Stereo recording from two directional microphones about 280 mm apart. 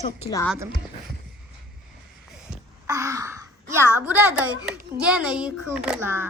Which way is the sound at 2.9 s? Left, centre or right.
Centre.